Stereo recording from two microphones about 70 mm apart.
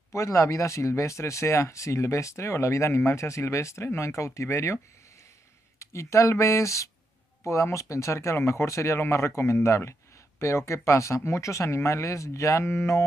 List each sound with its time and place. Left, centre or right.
0.1 s speech: left
5.8 s speech: left